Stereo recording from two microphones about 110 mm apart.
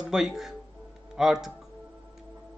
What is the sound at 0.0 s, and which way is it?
Speech, 5° right (ahead or behind).